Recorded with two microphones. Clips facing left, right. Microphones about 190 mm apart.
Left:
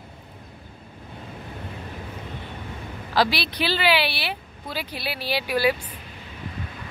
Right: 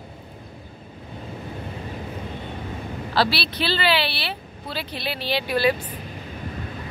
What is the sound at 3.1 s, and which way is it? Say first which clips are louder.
Speech: even; 15° left (ahead or behind).